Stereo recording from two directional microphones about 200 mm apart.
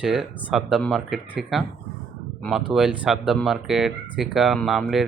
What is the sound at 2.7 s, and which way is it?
Speech, 5° right (ahead or behind).